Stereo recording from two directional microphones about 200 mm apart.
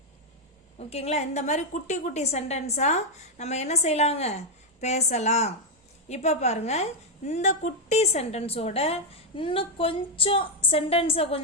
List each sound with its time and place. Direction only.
0.8 s a woman's voice: 30° left (ahead or behind)